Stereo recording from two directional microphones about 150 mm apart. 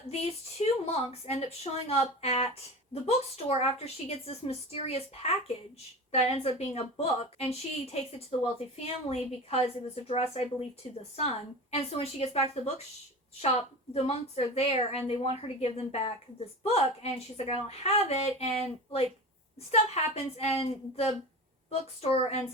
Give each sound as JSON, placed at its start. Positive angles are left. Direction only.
{"t": 0.1, "sound": "a woman's voice", "side_deg": 45}
{"t": 13.9, "sound": "a woman's voice", "side_deg": 45}